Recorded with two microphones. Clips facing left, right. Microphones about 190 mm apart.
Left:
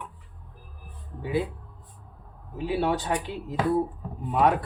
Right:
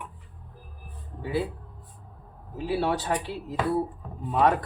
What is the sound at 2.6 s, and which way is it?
Speech, 15° left (ahead or behind).